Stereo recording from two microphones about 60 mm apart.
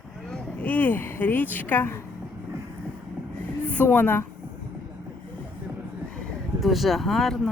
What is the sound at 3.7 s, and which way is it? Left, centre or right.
Speech, left.